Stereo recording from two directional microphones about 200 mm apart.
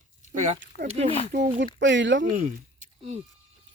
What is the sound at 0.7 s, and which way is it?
Speech, 35° left (ahead or behind).